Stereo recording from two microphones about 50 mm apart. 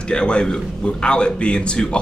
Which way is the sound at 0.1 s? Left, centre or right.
Centre.